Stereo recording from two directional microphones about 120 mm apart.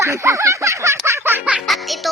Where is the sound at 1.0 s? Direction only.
20° right (ahead or behind).